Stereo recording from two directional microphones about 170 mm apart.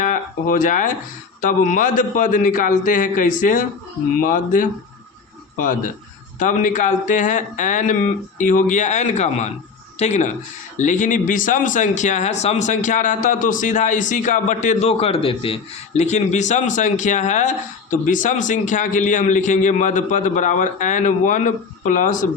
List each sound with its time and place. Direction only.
0.0 s speech: 55° left (ahead or behind)